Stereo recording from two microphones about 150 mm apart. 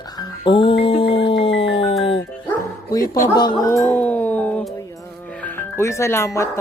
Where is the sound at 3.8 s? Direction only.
10° left (ahead or behind).